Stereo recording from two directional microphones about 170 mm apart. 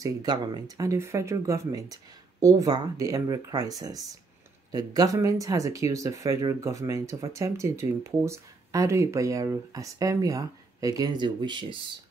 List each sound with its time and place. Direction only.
0.0 s speech: 20° right (ahead or behind)